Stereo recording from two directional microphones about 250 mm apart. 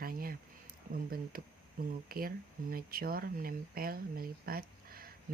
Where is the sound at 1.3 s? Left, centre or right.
Right.